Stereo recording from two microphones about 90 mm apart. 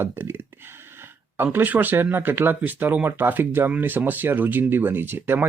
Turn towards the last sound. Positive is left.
turn(degrees=-25)  # may be behind; listen again after turning